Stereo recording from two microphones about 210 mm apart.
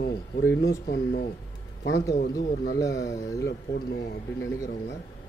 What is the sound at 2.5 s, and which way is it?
Speech, 45° left (ahead or behind).